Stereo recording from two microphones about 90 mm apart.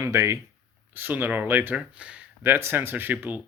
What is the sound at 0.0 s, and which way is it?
Speech, 35° right (ahead or behind).